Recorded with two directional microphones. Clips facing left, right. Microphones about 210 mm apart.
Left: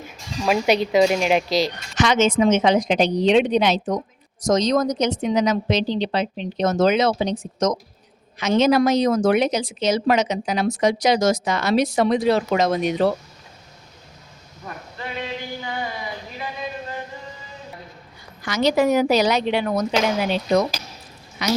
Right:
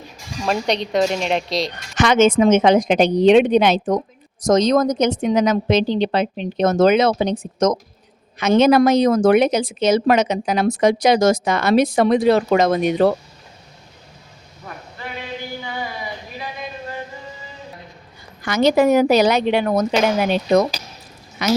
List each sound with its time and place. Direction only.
0.4 s speech: 5° left (ahead or behind)
2.0 s a woman's voice: 55° right (ahead or behind)
18.4 s a woman's voice: 55° right (ahead or behind)
21.4 s a woman's voice: 50° right (ahead or behind)